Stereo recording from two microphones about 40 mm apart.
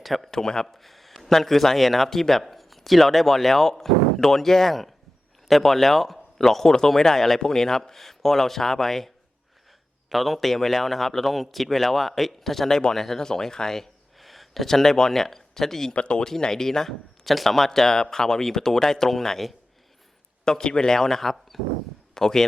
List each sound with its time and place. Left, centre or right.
0.0 s speech: centre
0.3 s speech: centre
0.8 s speech: centre
10.1 s speech: centre
14.2 s speech: centre
15.9 s speech: left
16.2 s speech: centre